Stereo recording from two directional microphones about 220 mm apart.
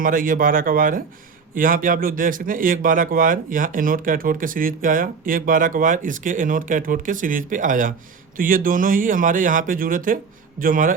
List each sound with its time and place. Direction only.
0.0 s speech: 40° right (ahead or behind)